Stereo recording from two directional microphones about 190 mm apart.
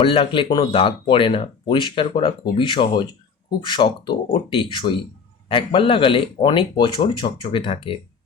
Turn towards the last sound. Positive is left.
turn(degrees=25)  # may be behind; listen again after turning